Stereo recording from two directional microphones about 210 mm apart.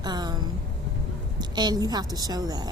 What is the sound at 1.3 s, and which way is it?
Speech, 20° right (ahead or behind).